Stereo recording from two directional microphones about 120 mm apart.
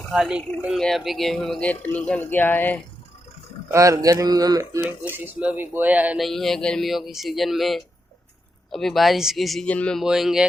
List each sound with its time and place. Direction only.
0.1 s speech: 5° right (ahead or behind); by 2.8 s 15° left (ahead or behind)
3.7 s speech: 25° right (ahead or behind)
5.1 s speech: 15° right (ahead or behind)
6.1 s speech: centre (ahead or behind)
9.6 s speech: 10° left (ahead or behind)
10.0 s speech: 5° right (ahead or behind)